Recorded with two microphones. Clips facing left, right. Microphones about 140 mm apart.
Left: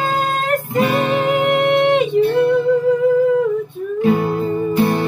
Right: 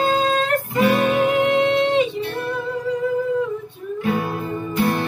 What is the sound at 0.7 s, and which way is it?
Music, 25° left (ahead or behind).